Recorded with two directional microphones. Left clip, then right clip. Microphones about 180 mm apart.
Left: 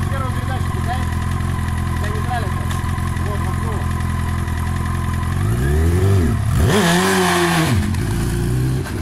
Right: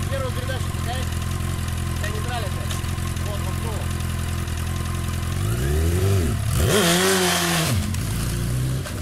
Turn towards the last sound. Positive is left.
turn(degrees=-25)  # may be behind; listen again after turning